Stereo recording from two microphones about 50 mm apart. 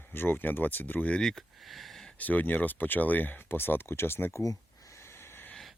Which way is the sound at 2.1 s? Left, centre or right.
Left.